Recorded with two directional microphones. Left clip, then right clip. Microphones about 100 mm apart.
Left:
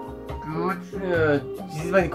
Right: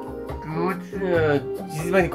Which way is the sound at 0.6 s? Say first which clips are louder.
Right 2 dB; 90° right.